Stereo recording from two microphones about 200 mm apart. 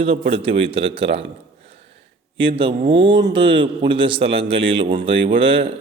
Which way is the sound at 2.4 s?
25° right (ahead or behind).